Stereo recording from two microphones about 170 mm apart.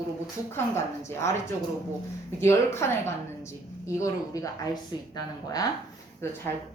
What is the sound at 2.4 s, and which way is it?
A woman's voice, 15° left (ahead or behind).